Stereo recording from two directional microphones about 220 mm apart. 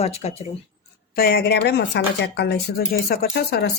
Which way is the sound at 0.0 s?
30° left (ahead or behind).